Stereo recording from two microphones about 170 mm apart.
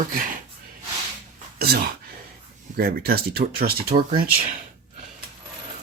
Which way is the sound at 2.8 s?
60° right (ahead or behind).